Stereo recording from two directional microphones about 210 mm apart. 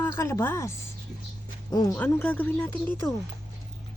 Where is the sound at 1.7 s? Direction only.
20° left (ahead or behind).